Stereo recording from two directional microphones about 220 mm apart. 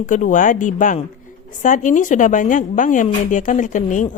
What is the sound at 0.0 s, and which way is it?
A woman's voice, 35° left (ahead or behind).